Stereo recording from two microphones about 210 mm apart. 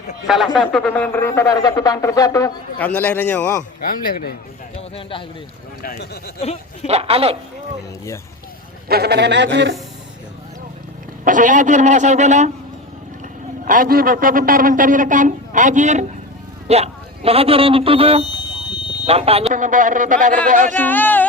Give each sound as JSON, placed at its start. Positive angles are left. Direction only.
{"t": 0.3, "sound": "speech", "side_deg": 0}
{"t": 3.8, "sound": "speech", "side_deg": 45}
{"t": 4.8, "sound": "speech", "side_deg": 25}
{"t": 5.8, "sound": "speech", "side_deg": 45}
{"t": 6.8, "sound": "a man's voice", "side_deg": -30}
{"t": 8.9, "sound": "speech", "side_deg": -50}
{"t": 11.3, "sound": "a man's voice", "side_deg": -40}
{"t": 13.7, "sound": "a man's voice", "side_deg": -40}
{"t": 20.8, "sound": "speech", "side_deg": 10}